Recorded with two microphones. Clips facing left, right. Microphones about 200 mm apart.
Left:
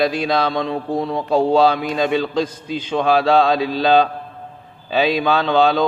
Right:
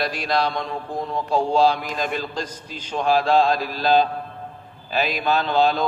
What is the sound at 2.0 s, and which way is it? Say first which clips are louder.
Speech: left 8 dB; 90° left.